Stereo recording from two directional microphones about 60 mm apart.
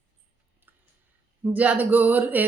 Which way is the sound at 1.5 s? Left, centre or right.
Right.